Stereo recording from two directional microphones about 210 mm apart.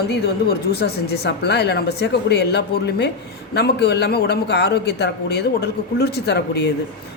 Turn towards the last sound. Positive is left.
turn(degrees=50)  # may be behind; listen again after turning